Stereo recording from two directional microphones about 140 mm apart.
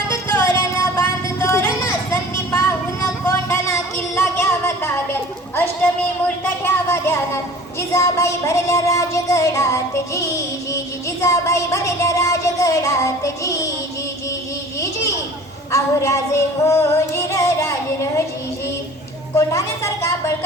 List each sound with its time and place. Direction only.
0.1 s music: 15° left (ahead or behind)
2.0 s a sound: 20° left (ahead or behind)
3.0 s music: 20° left (ahead or behind)
6.2 s a sound: 15° left (ahead or behind)
7.8 s child singing: 20° left (ahead or behind)
11.2 s music: 20° left (ahead or behind)
14.8 s children playing: 20° left (ahead or behind)
15.7 s female singing: 20° left (ahead or behind)
19.3 s a woman's voice: 20° left (ahead or behind)